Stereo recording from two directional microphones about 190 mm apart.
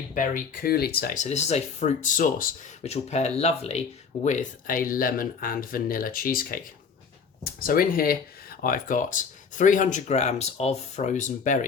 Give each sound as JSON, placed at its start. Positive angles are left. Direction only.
{"t": 0.1, "sound": "speech", "side_deg": 45}